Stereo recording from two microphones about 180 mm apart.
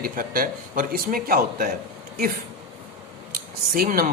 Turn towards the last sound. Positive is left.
turn(degrees=-50)  # may be behind; listen again after turning